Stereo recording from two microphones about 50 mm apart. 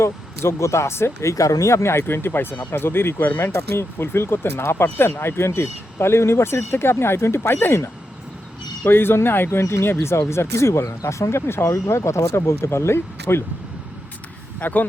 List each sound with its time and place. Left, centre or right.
0.0 s speech: left
8.9 s speech: left
14.6 s speech: left